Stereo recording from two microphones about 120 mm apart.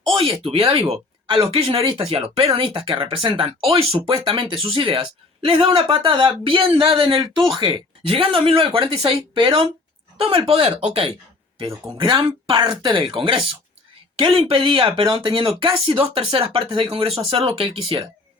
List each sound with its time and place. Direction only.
0.1 s speech: 50° right (ahead or behind)
11.9 s speech: 45° right (ahead or behind)